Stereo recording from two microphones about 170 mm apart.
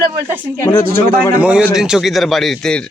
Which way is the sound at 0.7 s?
20° left (ahead or behind).